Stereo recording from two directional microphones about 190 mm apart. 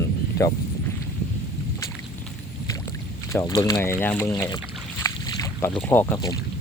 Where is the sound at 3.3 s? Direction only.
15° left (ahead or behind).